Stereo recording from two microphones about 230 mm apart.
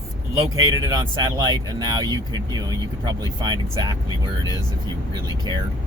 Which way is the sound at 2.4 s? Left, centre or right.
Centre.